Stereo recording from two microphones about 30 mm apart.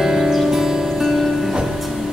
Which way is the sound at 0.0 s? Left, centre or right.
Centre.